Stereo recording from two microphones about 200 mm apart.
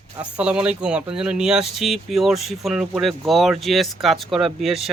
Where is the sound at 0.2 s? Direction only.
5° right (ahead or behind).